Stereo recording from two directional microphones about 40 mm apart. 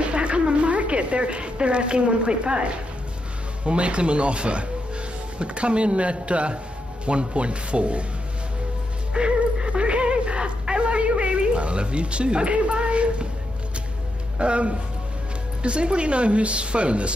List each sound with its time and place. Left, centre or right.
0.0 s a woman's voice: right
9.1 s a sound: right
14.4 s speech: right